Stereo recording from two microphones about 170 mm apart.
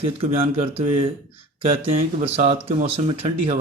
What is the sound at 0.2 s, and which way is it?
Speech, 35° right (ahead or behind).